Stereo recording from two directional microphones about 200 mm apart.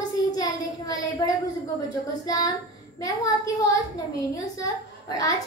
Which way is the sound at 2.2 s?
15° left (ahead or behind).